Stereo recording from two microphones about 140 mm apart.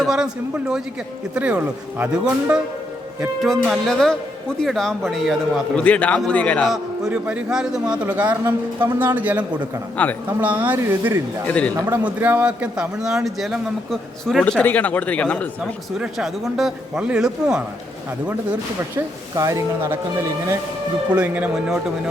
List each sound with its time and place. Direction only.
0.0 s a man's voice: 5° right (ahead or behind)
3.4 s speech: centre (ahead or behind)
7.0 s a man's voice: 10° right (ahead or behind)
11.4 s speech: 10° left (ahead or behind)
11.9 s speech: 15° right (ahead or behind)
18.9 s speech: 25° right (ahead or behind)
21.1 s a man's voice: 10° right (ahead or behind)